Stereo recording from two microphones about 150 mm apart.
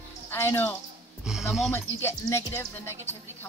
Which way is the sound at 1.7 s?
15° left (ahead or behind).